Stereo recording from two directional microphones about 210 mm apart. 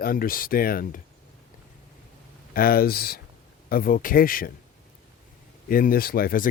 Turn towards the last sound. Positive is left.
turn(degrees=45)  # may be behind; listen again after turning